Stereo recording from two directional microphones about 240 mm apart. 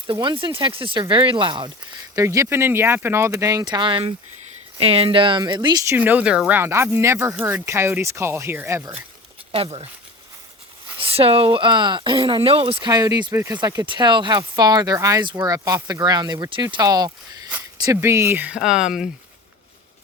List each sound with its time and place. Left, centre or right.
0.1 s speech: right
9.5 s speech: right
11.0 s speech: right; by 19.1 s centre